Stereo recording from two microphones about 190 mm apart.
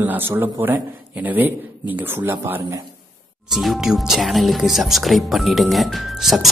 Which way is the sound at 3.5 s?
Centre (ahead or behind).